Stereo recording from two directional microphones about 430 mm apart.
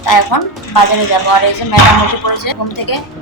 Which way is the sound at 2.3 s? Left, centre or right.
Left.